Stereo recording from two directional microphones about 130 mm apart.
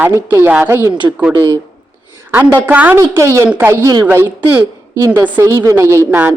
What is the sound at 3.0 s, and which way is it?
A woman's voice, 20° right (ahead or behind).